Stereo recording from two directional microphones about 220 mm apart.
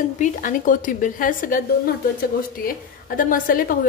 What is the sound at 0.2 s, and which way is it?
A woman's voice, 35° left (ahead or behind).